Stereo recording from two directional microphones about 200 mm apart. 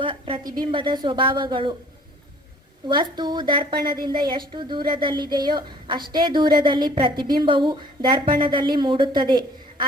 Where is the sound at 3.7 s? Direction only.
50° right (ahead or behind).